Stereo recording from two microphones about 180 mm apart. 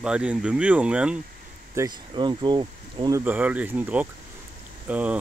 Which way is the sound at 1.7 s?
20° right (ahead or behind).